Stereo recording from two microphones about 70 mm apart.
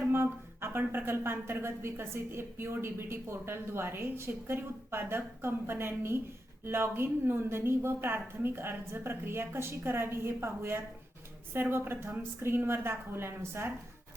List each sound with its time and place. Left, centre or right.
0.0 s speech: right